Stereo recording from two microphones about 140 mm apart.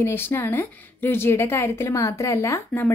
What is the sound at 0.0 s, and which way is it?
A woman's voice, 15° left (ahead or behind).